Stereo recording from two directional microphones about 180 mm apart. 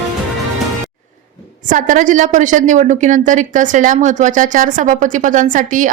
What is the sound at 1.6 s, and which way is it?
A woman's voice, 45° right (ahead or behind).